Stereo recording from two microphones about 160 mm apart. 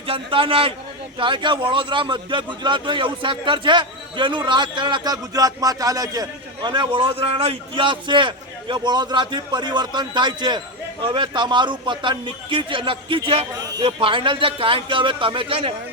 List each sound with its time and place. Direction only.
0.1 s a man's voice: 35° right (ahead or behind)